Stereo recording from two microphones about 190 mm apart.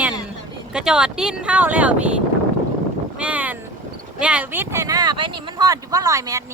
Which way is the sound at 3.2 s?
10° right (ahead or behind).